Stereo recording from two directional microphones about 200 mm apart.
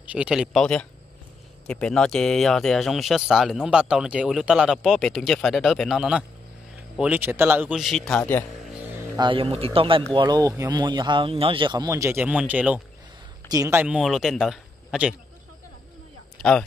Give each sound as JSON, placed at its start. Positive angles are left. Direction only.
{"t": 0.0, "sound": "speech", "side_deg": -5}
{"t": 9.1, "sound": "a man's voice", "side_deg": -25}
{"t": 16.4, "sound": "a sound", "side_deg": 0}